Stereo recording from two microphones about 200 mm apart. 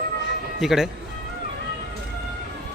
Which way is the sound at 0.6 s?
Centre (ahead or behind).